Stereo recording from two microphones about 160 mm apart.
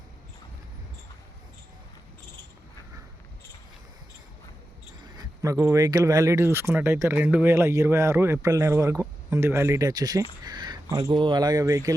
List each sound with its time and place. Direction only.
5.1 s speech: 20° right (ahead or behind)